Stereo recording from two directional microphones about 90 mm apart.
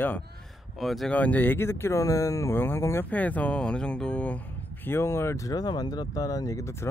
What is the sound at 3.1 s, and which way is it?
Speech, 15° left (ahead or behind).